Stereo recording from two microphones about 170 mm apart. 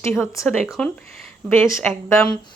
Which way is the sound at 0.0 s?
15° left (ahead or behind).